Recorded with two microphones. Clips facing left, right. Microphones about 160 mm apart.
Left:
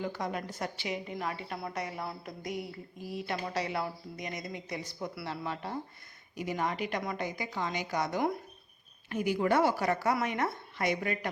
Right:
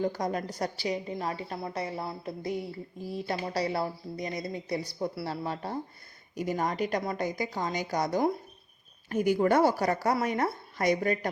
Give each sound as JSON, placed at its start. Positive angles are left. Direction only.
{"t": 0.0, "sound": "speech", "side_deg": -40}
{"t": 9.0, "sound": "speech", "side_deg": -45}